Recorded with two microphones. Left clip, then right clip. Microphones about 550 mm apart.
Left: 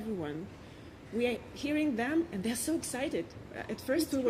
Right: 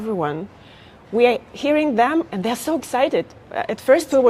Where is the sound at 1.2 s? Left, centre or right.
Right.